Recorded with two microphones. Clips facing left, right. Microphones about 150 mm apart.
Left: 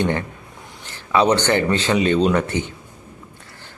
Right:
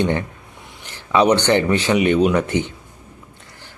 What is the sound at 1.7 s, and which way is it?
Speech, 15° right (ahead or behind).